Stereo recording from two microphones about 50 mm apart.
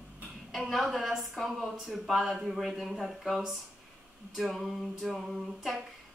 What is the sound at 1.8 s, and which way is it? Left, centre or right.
A woman's voice, centre.